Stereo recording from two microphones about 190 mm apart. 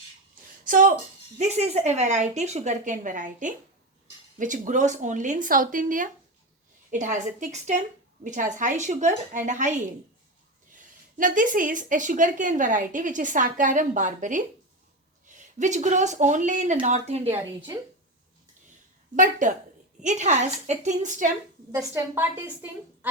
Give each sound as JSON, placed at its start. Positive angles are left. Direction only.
{"t": 0.6, "sound": "a sound", "side_deg": -45}
{"t": 1.4, "sound": "a woman's voice", "side_deg": -35}
{"t": 19.1, "sound": "a woman's voice", "side_deg": -40}
{"t": 21.7, "sound": "a woman's voice", "side_deg": -15}